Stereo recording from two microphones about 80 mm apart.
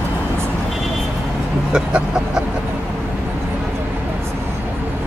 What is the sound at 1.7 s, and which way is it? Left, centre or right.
Vehicle, centre.